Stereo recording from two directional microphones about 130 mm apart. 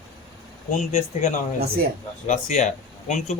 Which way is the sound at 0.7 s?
70° left (ahead or behind).